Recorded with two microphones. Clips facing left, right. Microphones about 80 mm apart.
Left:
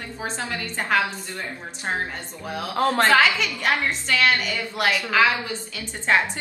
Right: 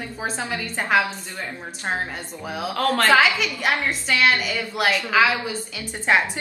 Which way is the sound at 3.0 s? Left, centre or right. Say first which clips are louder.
Right 1 dB; centre.